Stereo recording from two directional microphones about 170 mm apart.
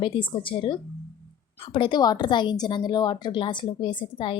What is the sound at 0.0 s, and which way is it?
Speech, 30° left (ahead or behind).